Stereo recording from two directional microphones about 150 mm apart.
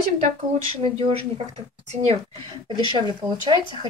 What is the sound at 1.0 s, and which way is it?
Speech, 40° right (ahead or behind).